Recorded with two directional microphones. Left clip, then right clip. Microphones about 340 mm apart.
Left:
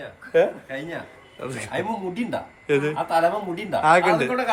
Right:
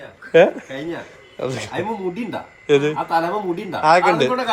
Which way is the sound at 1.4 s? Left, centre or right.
Centre.